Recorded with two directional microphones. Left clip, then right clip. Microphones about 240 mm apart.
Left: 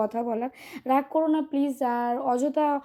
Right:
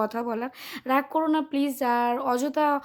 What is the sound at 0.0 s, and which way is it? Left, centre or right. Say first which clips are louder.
A woman's voice: left 1 dB; centre.